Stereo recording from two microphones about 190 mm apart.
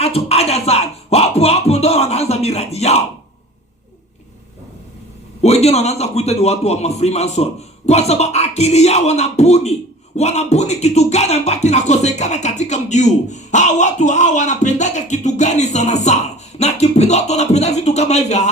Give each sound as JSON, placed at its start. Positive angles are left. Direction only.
{"t": 0.0, "sound": "speech", "side_deg": 35}
{"t": 5.4, "sound": "speech", "side_deg": 35}